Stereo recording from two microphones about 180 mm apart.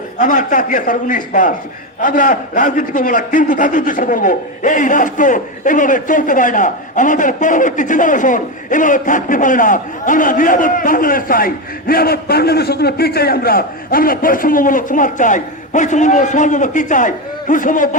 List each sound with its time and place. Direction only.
0.2 s a man's voice: 45° left (ahead or behind)